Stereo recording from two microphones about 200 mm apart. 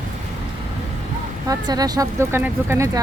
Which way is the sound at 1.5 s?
20° right (ahead or behind).